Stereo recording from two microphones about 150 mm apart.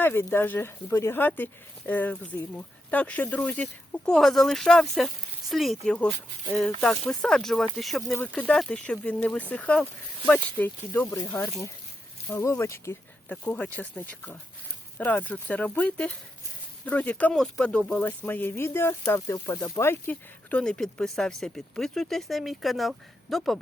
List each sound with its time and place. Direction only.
0.0 s speech: 15° left (ahead or behind)
8.1 s speech: 10° left (ahead or behind)
11.2 s speech: 25° left (ahead or behind); by 23.6 s centre (ahead or behind)